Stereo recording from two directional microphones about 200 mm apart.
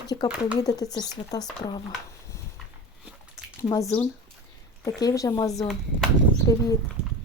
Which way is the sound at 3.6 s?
15° left (ahead or behind).